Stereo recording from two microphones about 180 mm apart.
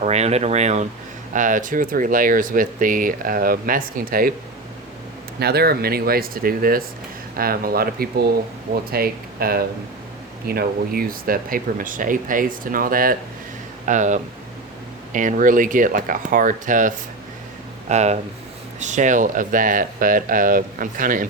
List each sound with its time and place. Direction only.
0.0 s speech: 35° right (ahead or behind); by 4.4 s 55° right (ahead or behind)
5.4 s speech: 60° right (ahead or behind)